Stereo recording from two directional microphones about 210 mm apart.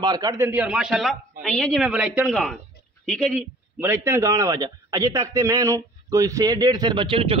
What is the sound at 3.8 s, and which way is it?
A man's voice, 10° right (ahead or behind).